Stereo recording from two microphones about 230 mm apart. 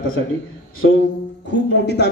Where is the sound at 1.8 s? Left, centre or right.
Left.